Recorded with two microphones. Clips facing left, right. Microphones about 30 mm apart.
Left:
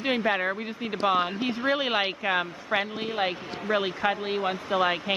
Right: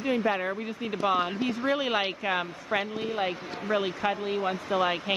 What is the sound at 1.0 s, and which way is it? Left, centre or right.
Speech, left.